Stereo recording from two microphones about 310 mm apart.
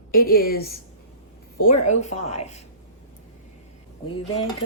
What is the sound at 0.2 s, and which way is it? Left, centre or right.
Cutlery, left.